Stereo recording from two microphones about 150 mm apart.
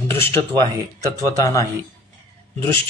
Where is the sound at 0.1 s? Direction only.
15° left (ahead or behind).